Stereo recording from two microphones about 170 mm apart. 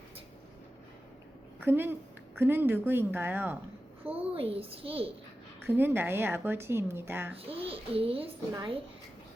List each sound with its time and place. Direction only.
1.6 s a woman's voice: 15° right (ahead or behind)
4.0 s a child's voice: 35° right (ahead or behind)
5.5 s a woman's voice: 15° right (ahead or behind)
7.3 s a child's voice: 35° right (ahead or behind)